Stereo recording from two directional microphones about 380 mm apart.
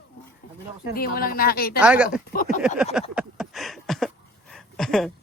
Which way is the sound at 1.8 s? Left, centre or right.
Centre.